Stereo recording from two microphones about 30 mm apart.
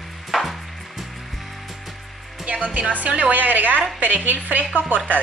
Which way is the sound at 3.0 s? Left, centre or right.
Right.